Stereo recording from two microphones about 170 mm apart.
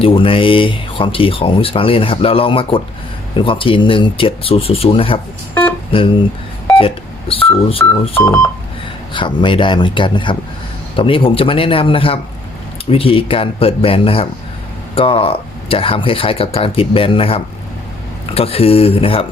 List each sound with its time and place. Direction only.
0.0 s speech: 30° left (ahead or behind)
6.7 s telephone dialing: 35° left (ahead or behind)
8.2 s telephone dialing: 15° left (ahead or behind)
9.1 s speech: 30° left (ahead or behind)